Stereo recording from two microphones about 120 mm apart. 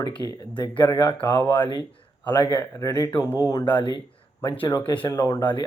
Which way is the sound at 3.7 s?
40° left (ahead or behind).